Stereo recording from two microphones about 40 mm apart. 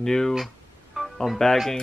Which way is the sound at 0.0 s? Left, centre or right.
Centre.